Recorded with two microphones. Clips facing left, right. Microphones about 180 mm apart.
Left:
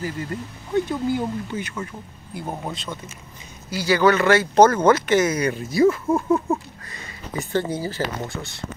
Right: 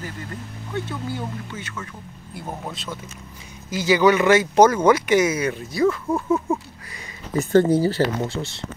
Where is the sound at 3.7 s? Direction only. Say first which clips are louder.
Right 1 dB; 15° right (ahead or behind); by 5.9 s 5° left (ahead or behind).